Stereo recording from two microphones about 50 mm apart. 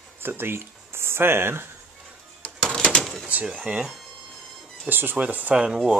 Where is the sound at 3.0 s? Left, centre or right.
Centre.